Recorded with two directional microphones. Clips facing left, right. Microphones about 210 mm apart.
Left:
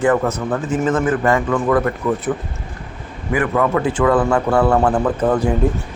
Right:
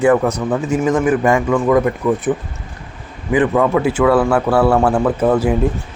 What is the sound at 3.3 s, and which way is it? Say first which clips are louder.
Speech: right 3 dB; 20° right (ahead or behind).